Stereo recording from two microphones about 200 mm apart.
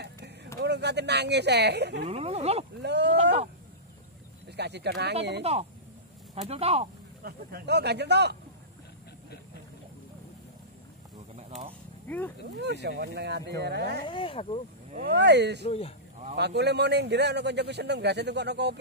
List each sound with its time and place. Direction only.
0.6 s speech: 55° right (ahead or behind)
2.0 s speech: 30° right (ahead or behind)
2.8 s speech: 60° right (ahead or behind)
4.5 s speech: 55° right (ahead or behind)
5.4 s speech: 30° right (ahead or behind)
7.2 s speech: 55° right (ahead or behind)
12.5 s speech: 55° right (ahead or behind)
14.0 s speech: 25° left (ahead or behind)
15.0 s speech: 55° right (ahead or behind)
15.6 s speech: 30° left (ahead or behind)
16.3 s speech: 55° right (ahead or behind)